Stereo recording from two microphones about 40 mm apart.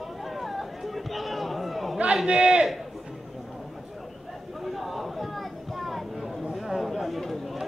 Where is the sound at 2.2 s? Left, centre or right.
Right.